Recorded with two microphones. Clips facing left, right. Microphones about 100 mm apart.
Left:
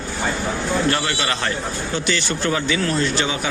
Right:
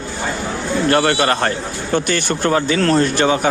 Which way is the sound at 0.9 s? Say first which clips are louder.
Right 8 dB; 50° right (ahead or behind).